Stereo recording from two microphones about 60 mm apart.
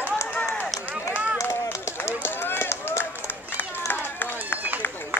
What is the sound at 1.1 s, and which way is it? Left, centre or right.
Run, right.